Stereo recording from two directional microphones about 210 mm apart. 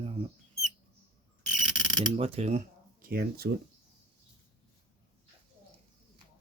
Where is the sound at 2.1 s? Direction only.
30° right (ahead or behind).